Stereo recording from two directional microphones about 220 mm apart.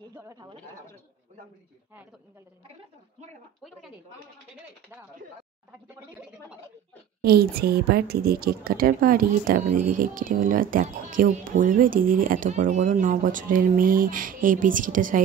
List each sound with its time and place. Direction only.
0.1 s speech: 15° right (ahead or behind)
7.2 s a woman's voice: 45° right (ahead or behind)